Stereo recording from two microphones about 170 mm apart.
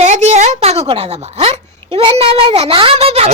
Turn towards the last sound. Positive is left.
turn(degrees=-35)  # may be behind; listen again after turning